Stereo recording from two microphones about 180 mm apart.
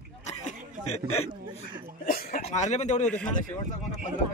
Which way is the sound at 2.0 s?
55° left (ahead or behind).